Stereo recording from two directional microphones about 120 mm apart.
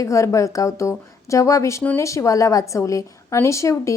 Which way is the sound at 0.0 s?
25° left (ahead or behind).